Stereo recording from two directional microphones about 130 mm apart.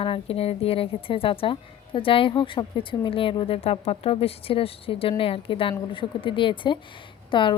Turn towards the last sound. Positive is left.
turn(degrees=40)  # may be behind; listen again after turning